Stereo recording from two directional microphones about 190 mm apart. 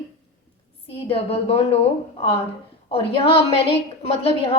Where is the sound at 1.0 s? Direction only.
30° left (ahead or behind).